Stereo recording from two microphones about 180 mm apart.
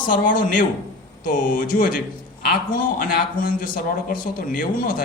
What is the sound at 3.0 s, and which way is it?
A man's voice, 50° left (ahead or behind).